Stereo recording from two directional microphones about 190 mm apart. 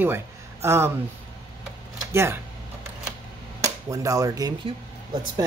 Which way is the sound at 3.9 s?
15° right (ahead or behind).